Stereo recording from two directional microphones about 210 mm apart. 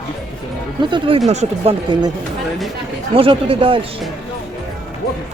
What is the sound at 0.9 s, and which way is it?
Speech, 25° right (ahead or behind).